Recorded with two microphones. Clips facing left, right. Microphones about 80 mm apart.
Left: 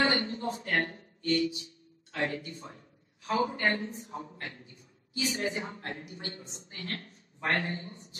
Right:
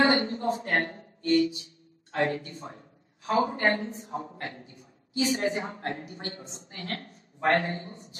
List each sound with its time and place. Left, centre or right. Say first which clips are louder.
0.0 s a man's voice: right 5 dB; right